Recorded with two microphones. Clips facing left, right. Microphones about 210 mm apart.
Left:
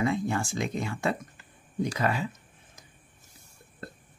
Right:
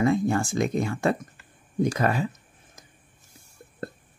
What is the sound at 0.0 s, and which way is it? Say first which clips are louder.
Speech: right 5 dB; 45° right (ahead or behind).